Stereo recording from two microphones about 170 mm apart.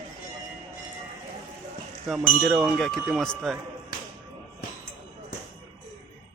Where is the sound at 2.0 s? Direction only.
Centre (ahead or behind).